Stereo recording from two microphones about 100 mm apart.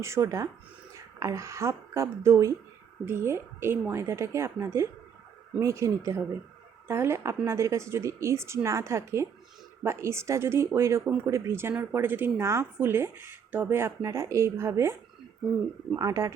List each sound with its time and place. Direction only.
0.0 s a woman's voice: 30° right (ahead or behind)
16.0 s a woman's voice: 35° right (ahead or behind)